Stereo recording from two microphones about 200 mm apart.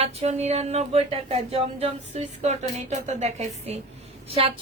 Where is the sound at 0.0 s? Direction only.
30° right (ahead or behind).